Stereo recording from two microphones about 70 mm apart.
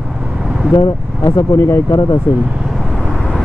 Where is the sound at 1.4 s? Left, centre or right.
Left.